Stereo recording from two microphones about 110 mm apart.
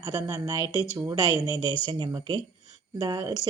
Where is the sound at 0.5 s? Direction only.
40° right (ahead or behind).